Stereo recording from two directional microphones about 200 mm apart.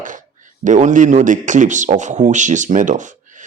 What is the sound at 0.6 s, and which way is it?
A man's voice, 40° right (ahead or behind).